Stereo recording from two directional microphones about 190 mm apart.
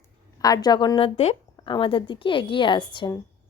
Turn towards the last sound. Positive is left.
turn(degrees=25)  # may be behind; listen again after turning